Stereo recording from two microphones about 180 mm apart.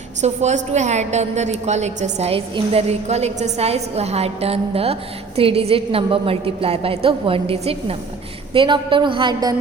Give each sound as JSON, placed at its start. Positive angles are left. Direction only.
{"t": 0.2, "sound": "a woman's voice", "side_deg": -40}